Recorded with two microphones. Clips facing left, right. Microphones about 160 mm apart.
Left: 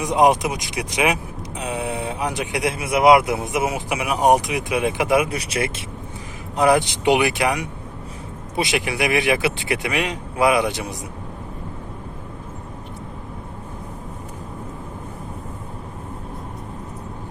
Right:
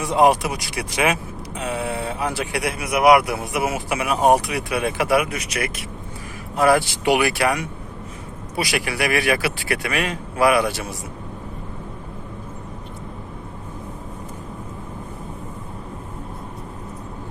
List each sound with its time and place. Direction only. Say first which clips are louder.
0.0 s speech: even; 15° left (ahead or behind)